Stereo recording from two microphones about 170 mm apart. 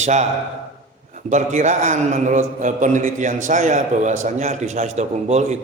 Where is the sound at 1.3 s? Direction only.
45° right (ahead or behind).